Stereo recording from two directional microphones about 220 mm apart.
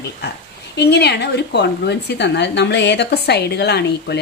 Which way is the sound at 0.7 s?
50° left (ahead or behind).